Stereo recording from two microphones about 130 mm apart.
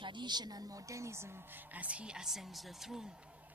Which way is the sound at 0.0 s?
35° right (ahead or behind).